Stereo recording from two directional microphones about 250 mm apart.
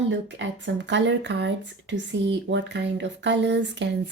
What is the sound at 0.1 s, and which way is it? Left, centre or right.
Speech, right.